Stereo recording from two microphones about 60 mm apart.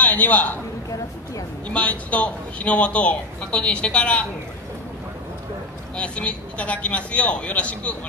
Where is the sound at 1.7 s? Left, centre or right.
Left.